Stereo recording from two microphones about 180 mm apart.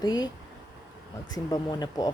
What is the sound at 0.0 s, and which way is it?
Speech, 20° left (ahead or behind).